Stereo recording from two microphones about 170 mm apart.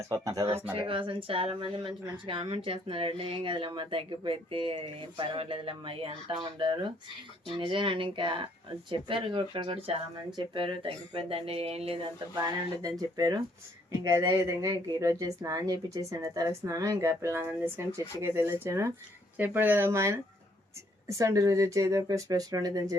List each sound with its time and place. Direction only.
0.1 s speech: 20° right (ahead or behind)
0.7 s speech: 30° right (ahead or behind)
12.4 s speech: 20° right (ahead or behind)